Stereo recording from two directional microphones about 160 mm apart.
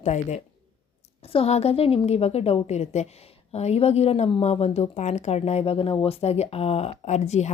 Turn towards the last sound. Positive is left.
turn(degrees=45)  # may be behind; listen again after turning